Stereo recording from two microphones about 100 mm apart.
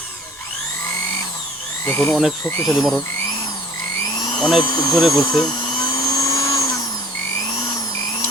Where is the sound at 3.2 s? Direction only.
40° left (ahead or behind).